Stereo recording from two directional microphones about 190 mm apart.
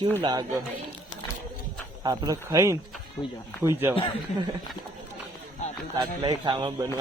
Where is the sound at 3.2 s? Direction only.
15° left (ahead or behind).